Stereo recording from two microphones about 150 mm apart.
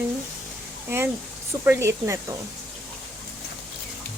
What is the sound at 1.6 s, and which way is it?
Speech, 20° right (ahead or behind).